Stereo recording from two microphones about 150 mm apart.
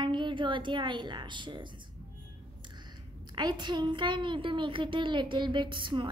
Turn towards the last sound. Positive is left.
turn(degrees=-30)  # may be behind; listen again after turning